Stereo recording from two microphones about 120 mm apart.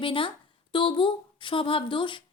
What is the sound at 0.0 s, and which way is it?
A woman's voice, 45° left (ahead or behind).